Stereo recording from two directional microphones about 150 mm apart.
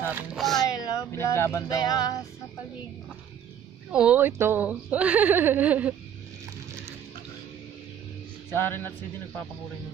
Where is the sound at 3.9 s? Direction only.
10° right (ahead or behind).